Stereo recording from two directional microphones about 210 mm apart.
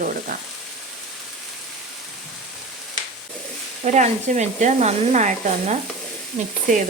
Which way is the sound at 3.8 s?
35° right (ahead or behind).